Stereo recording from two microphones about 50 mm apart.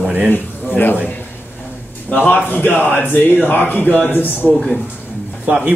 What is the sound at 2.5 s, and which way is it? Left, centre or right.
Speech, left.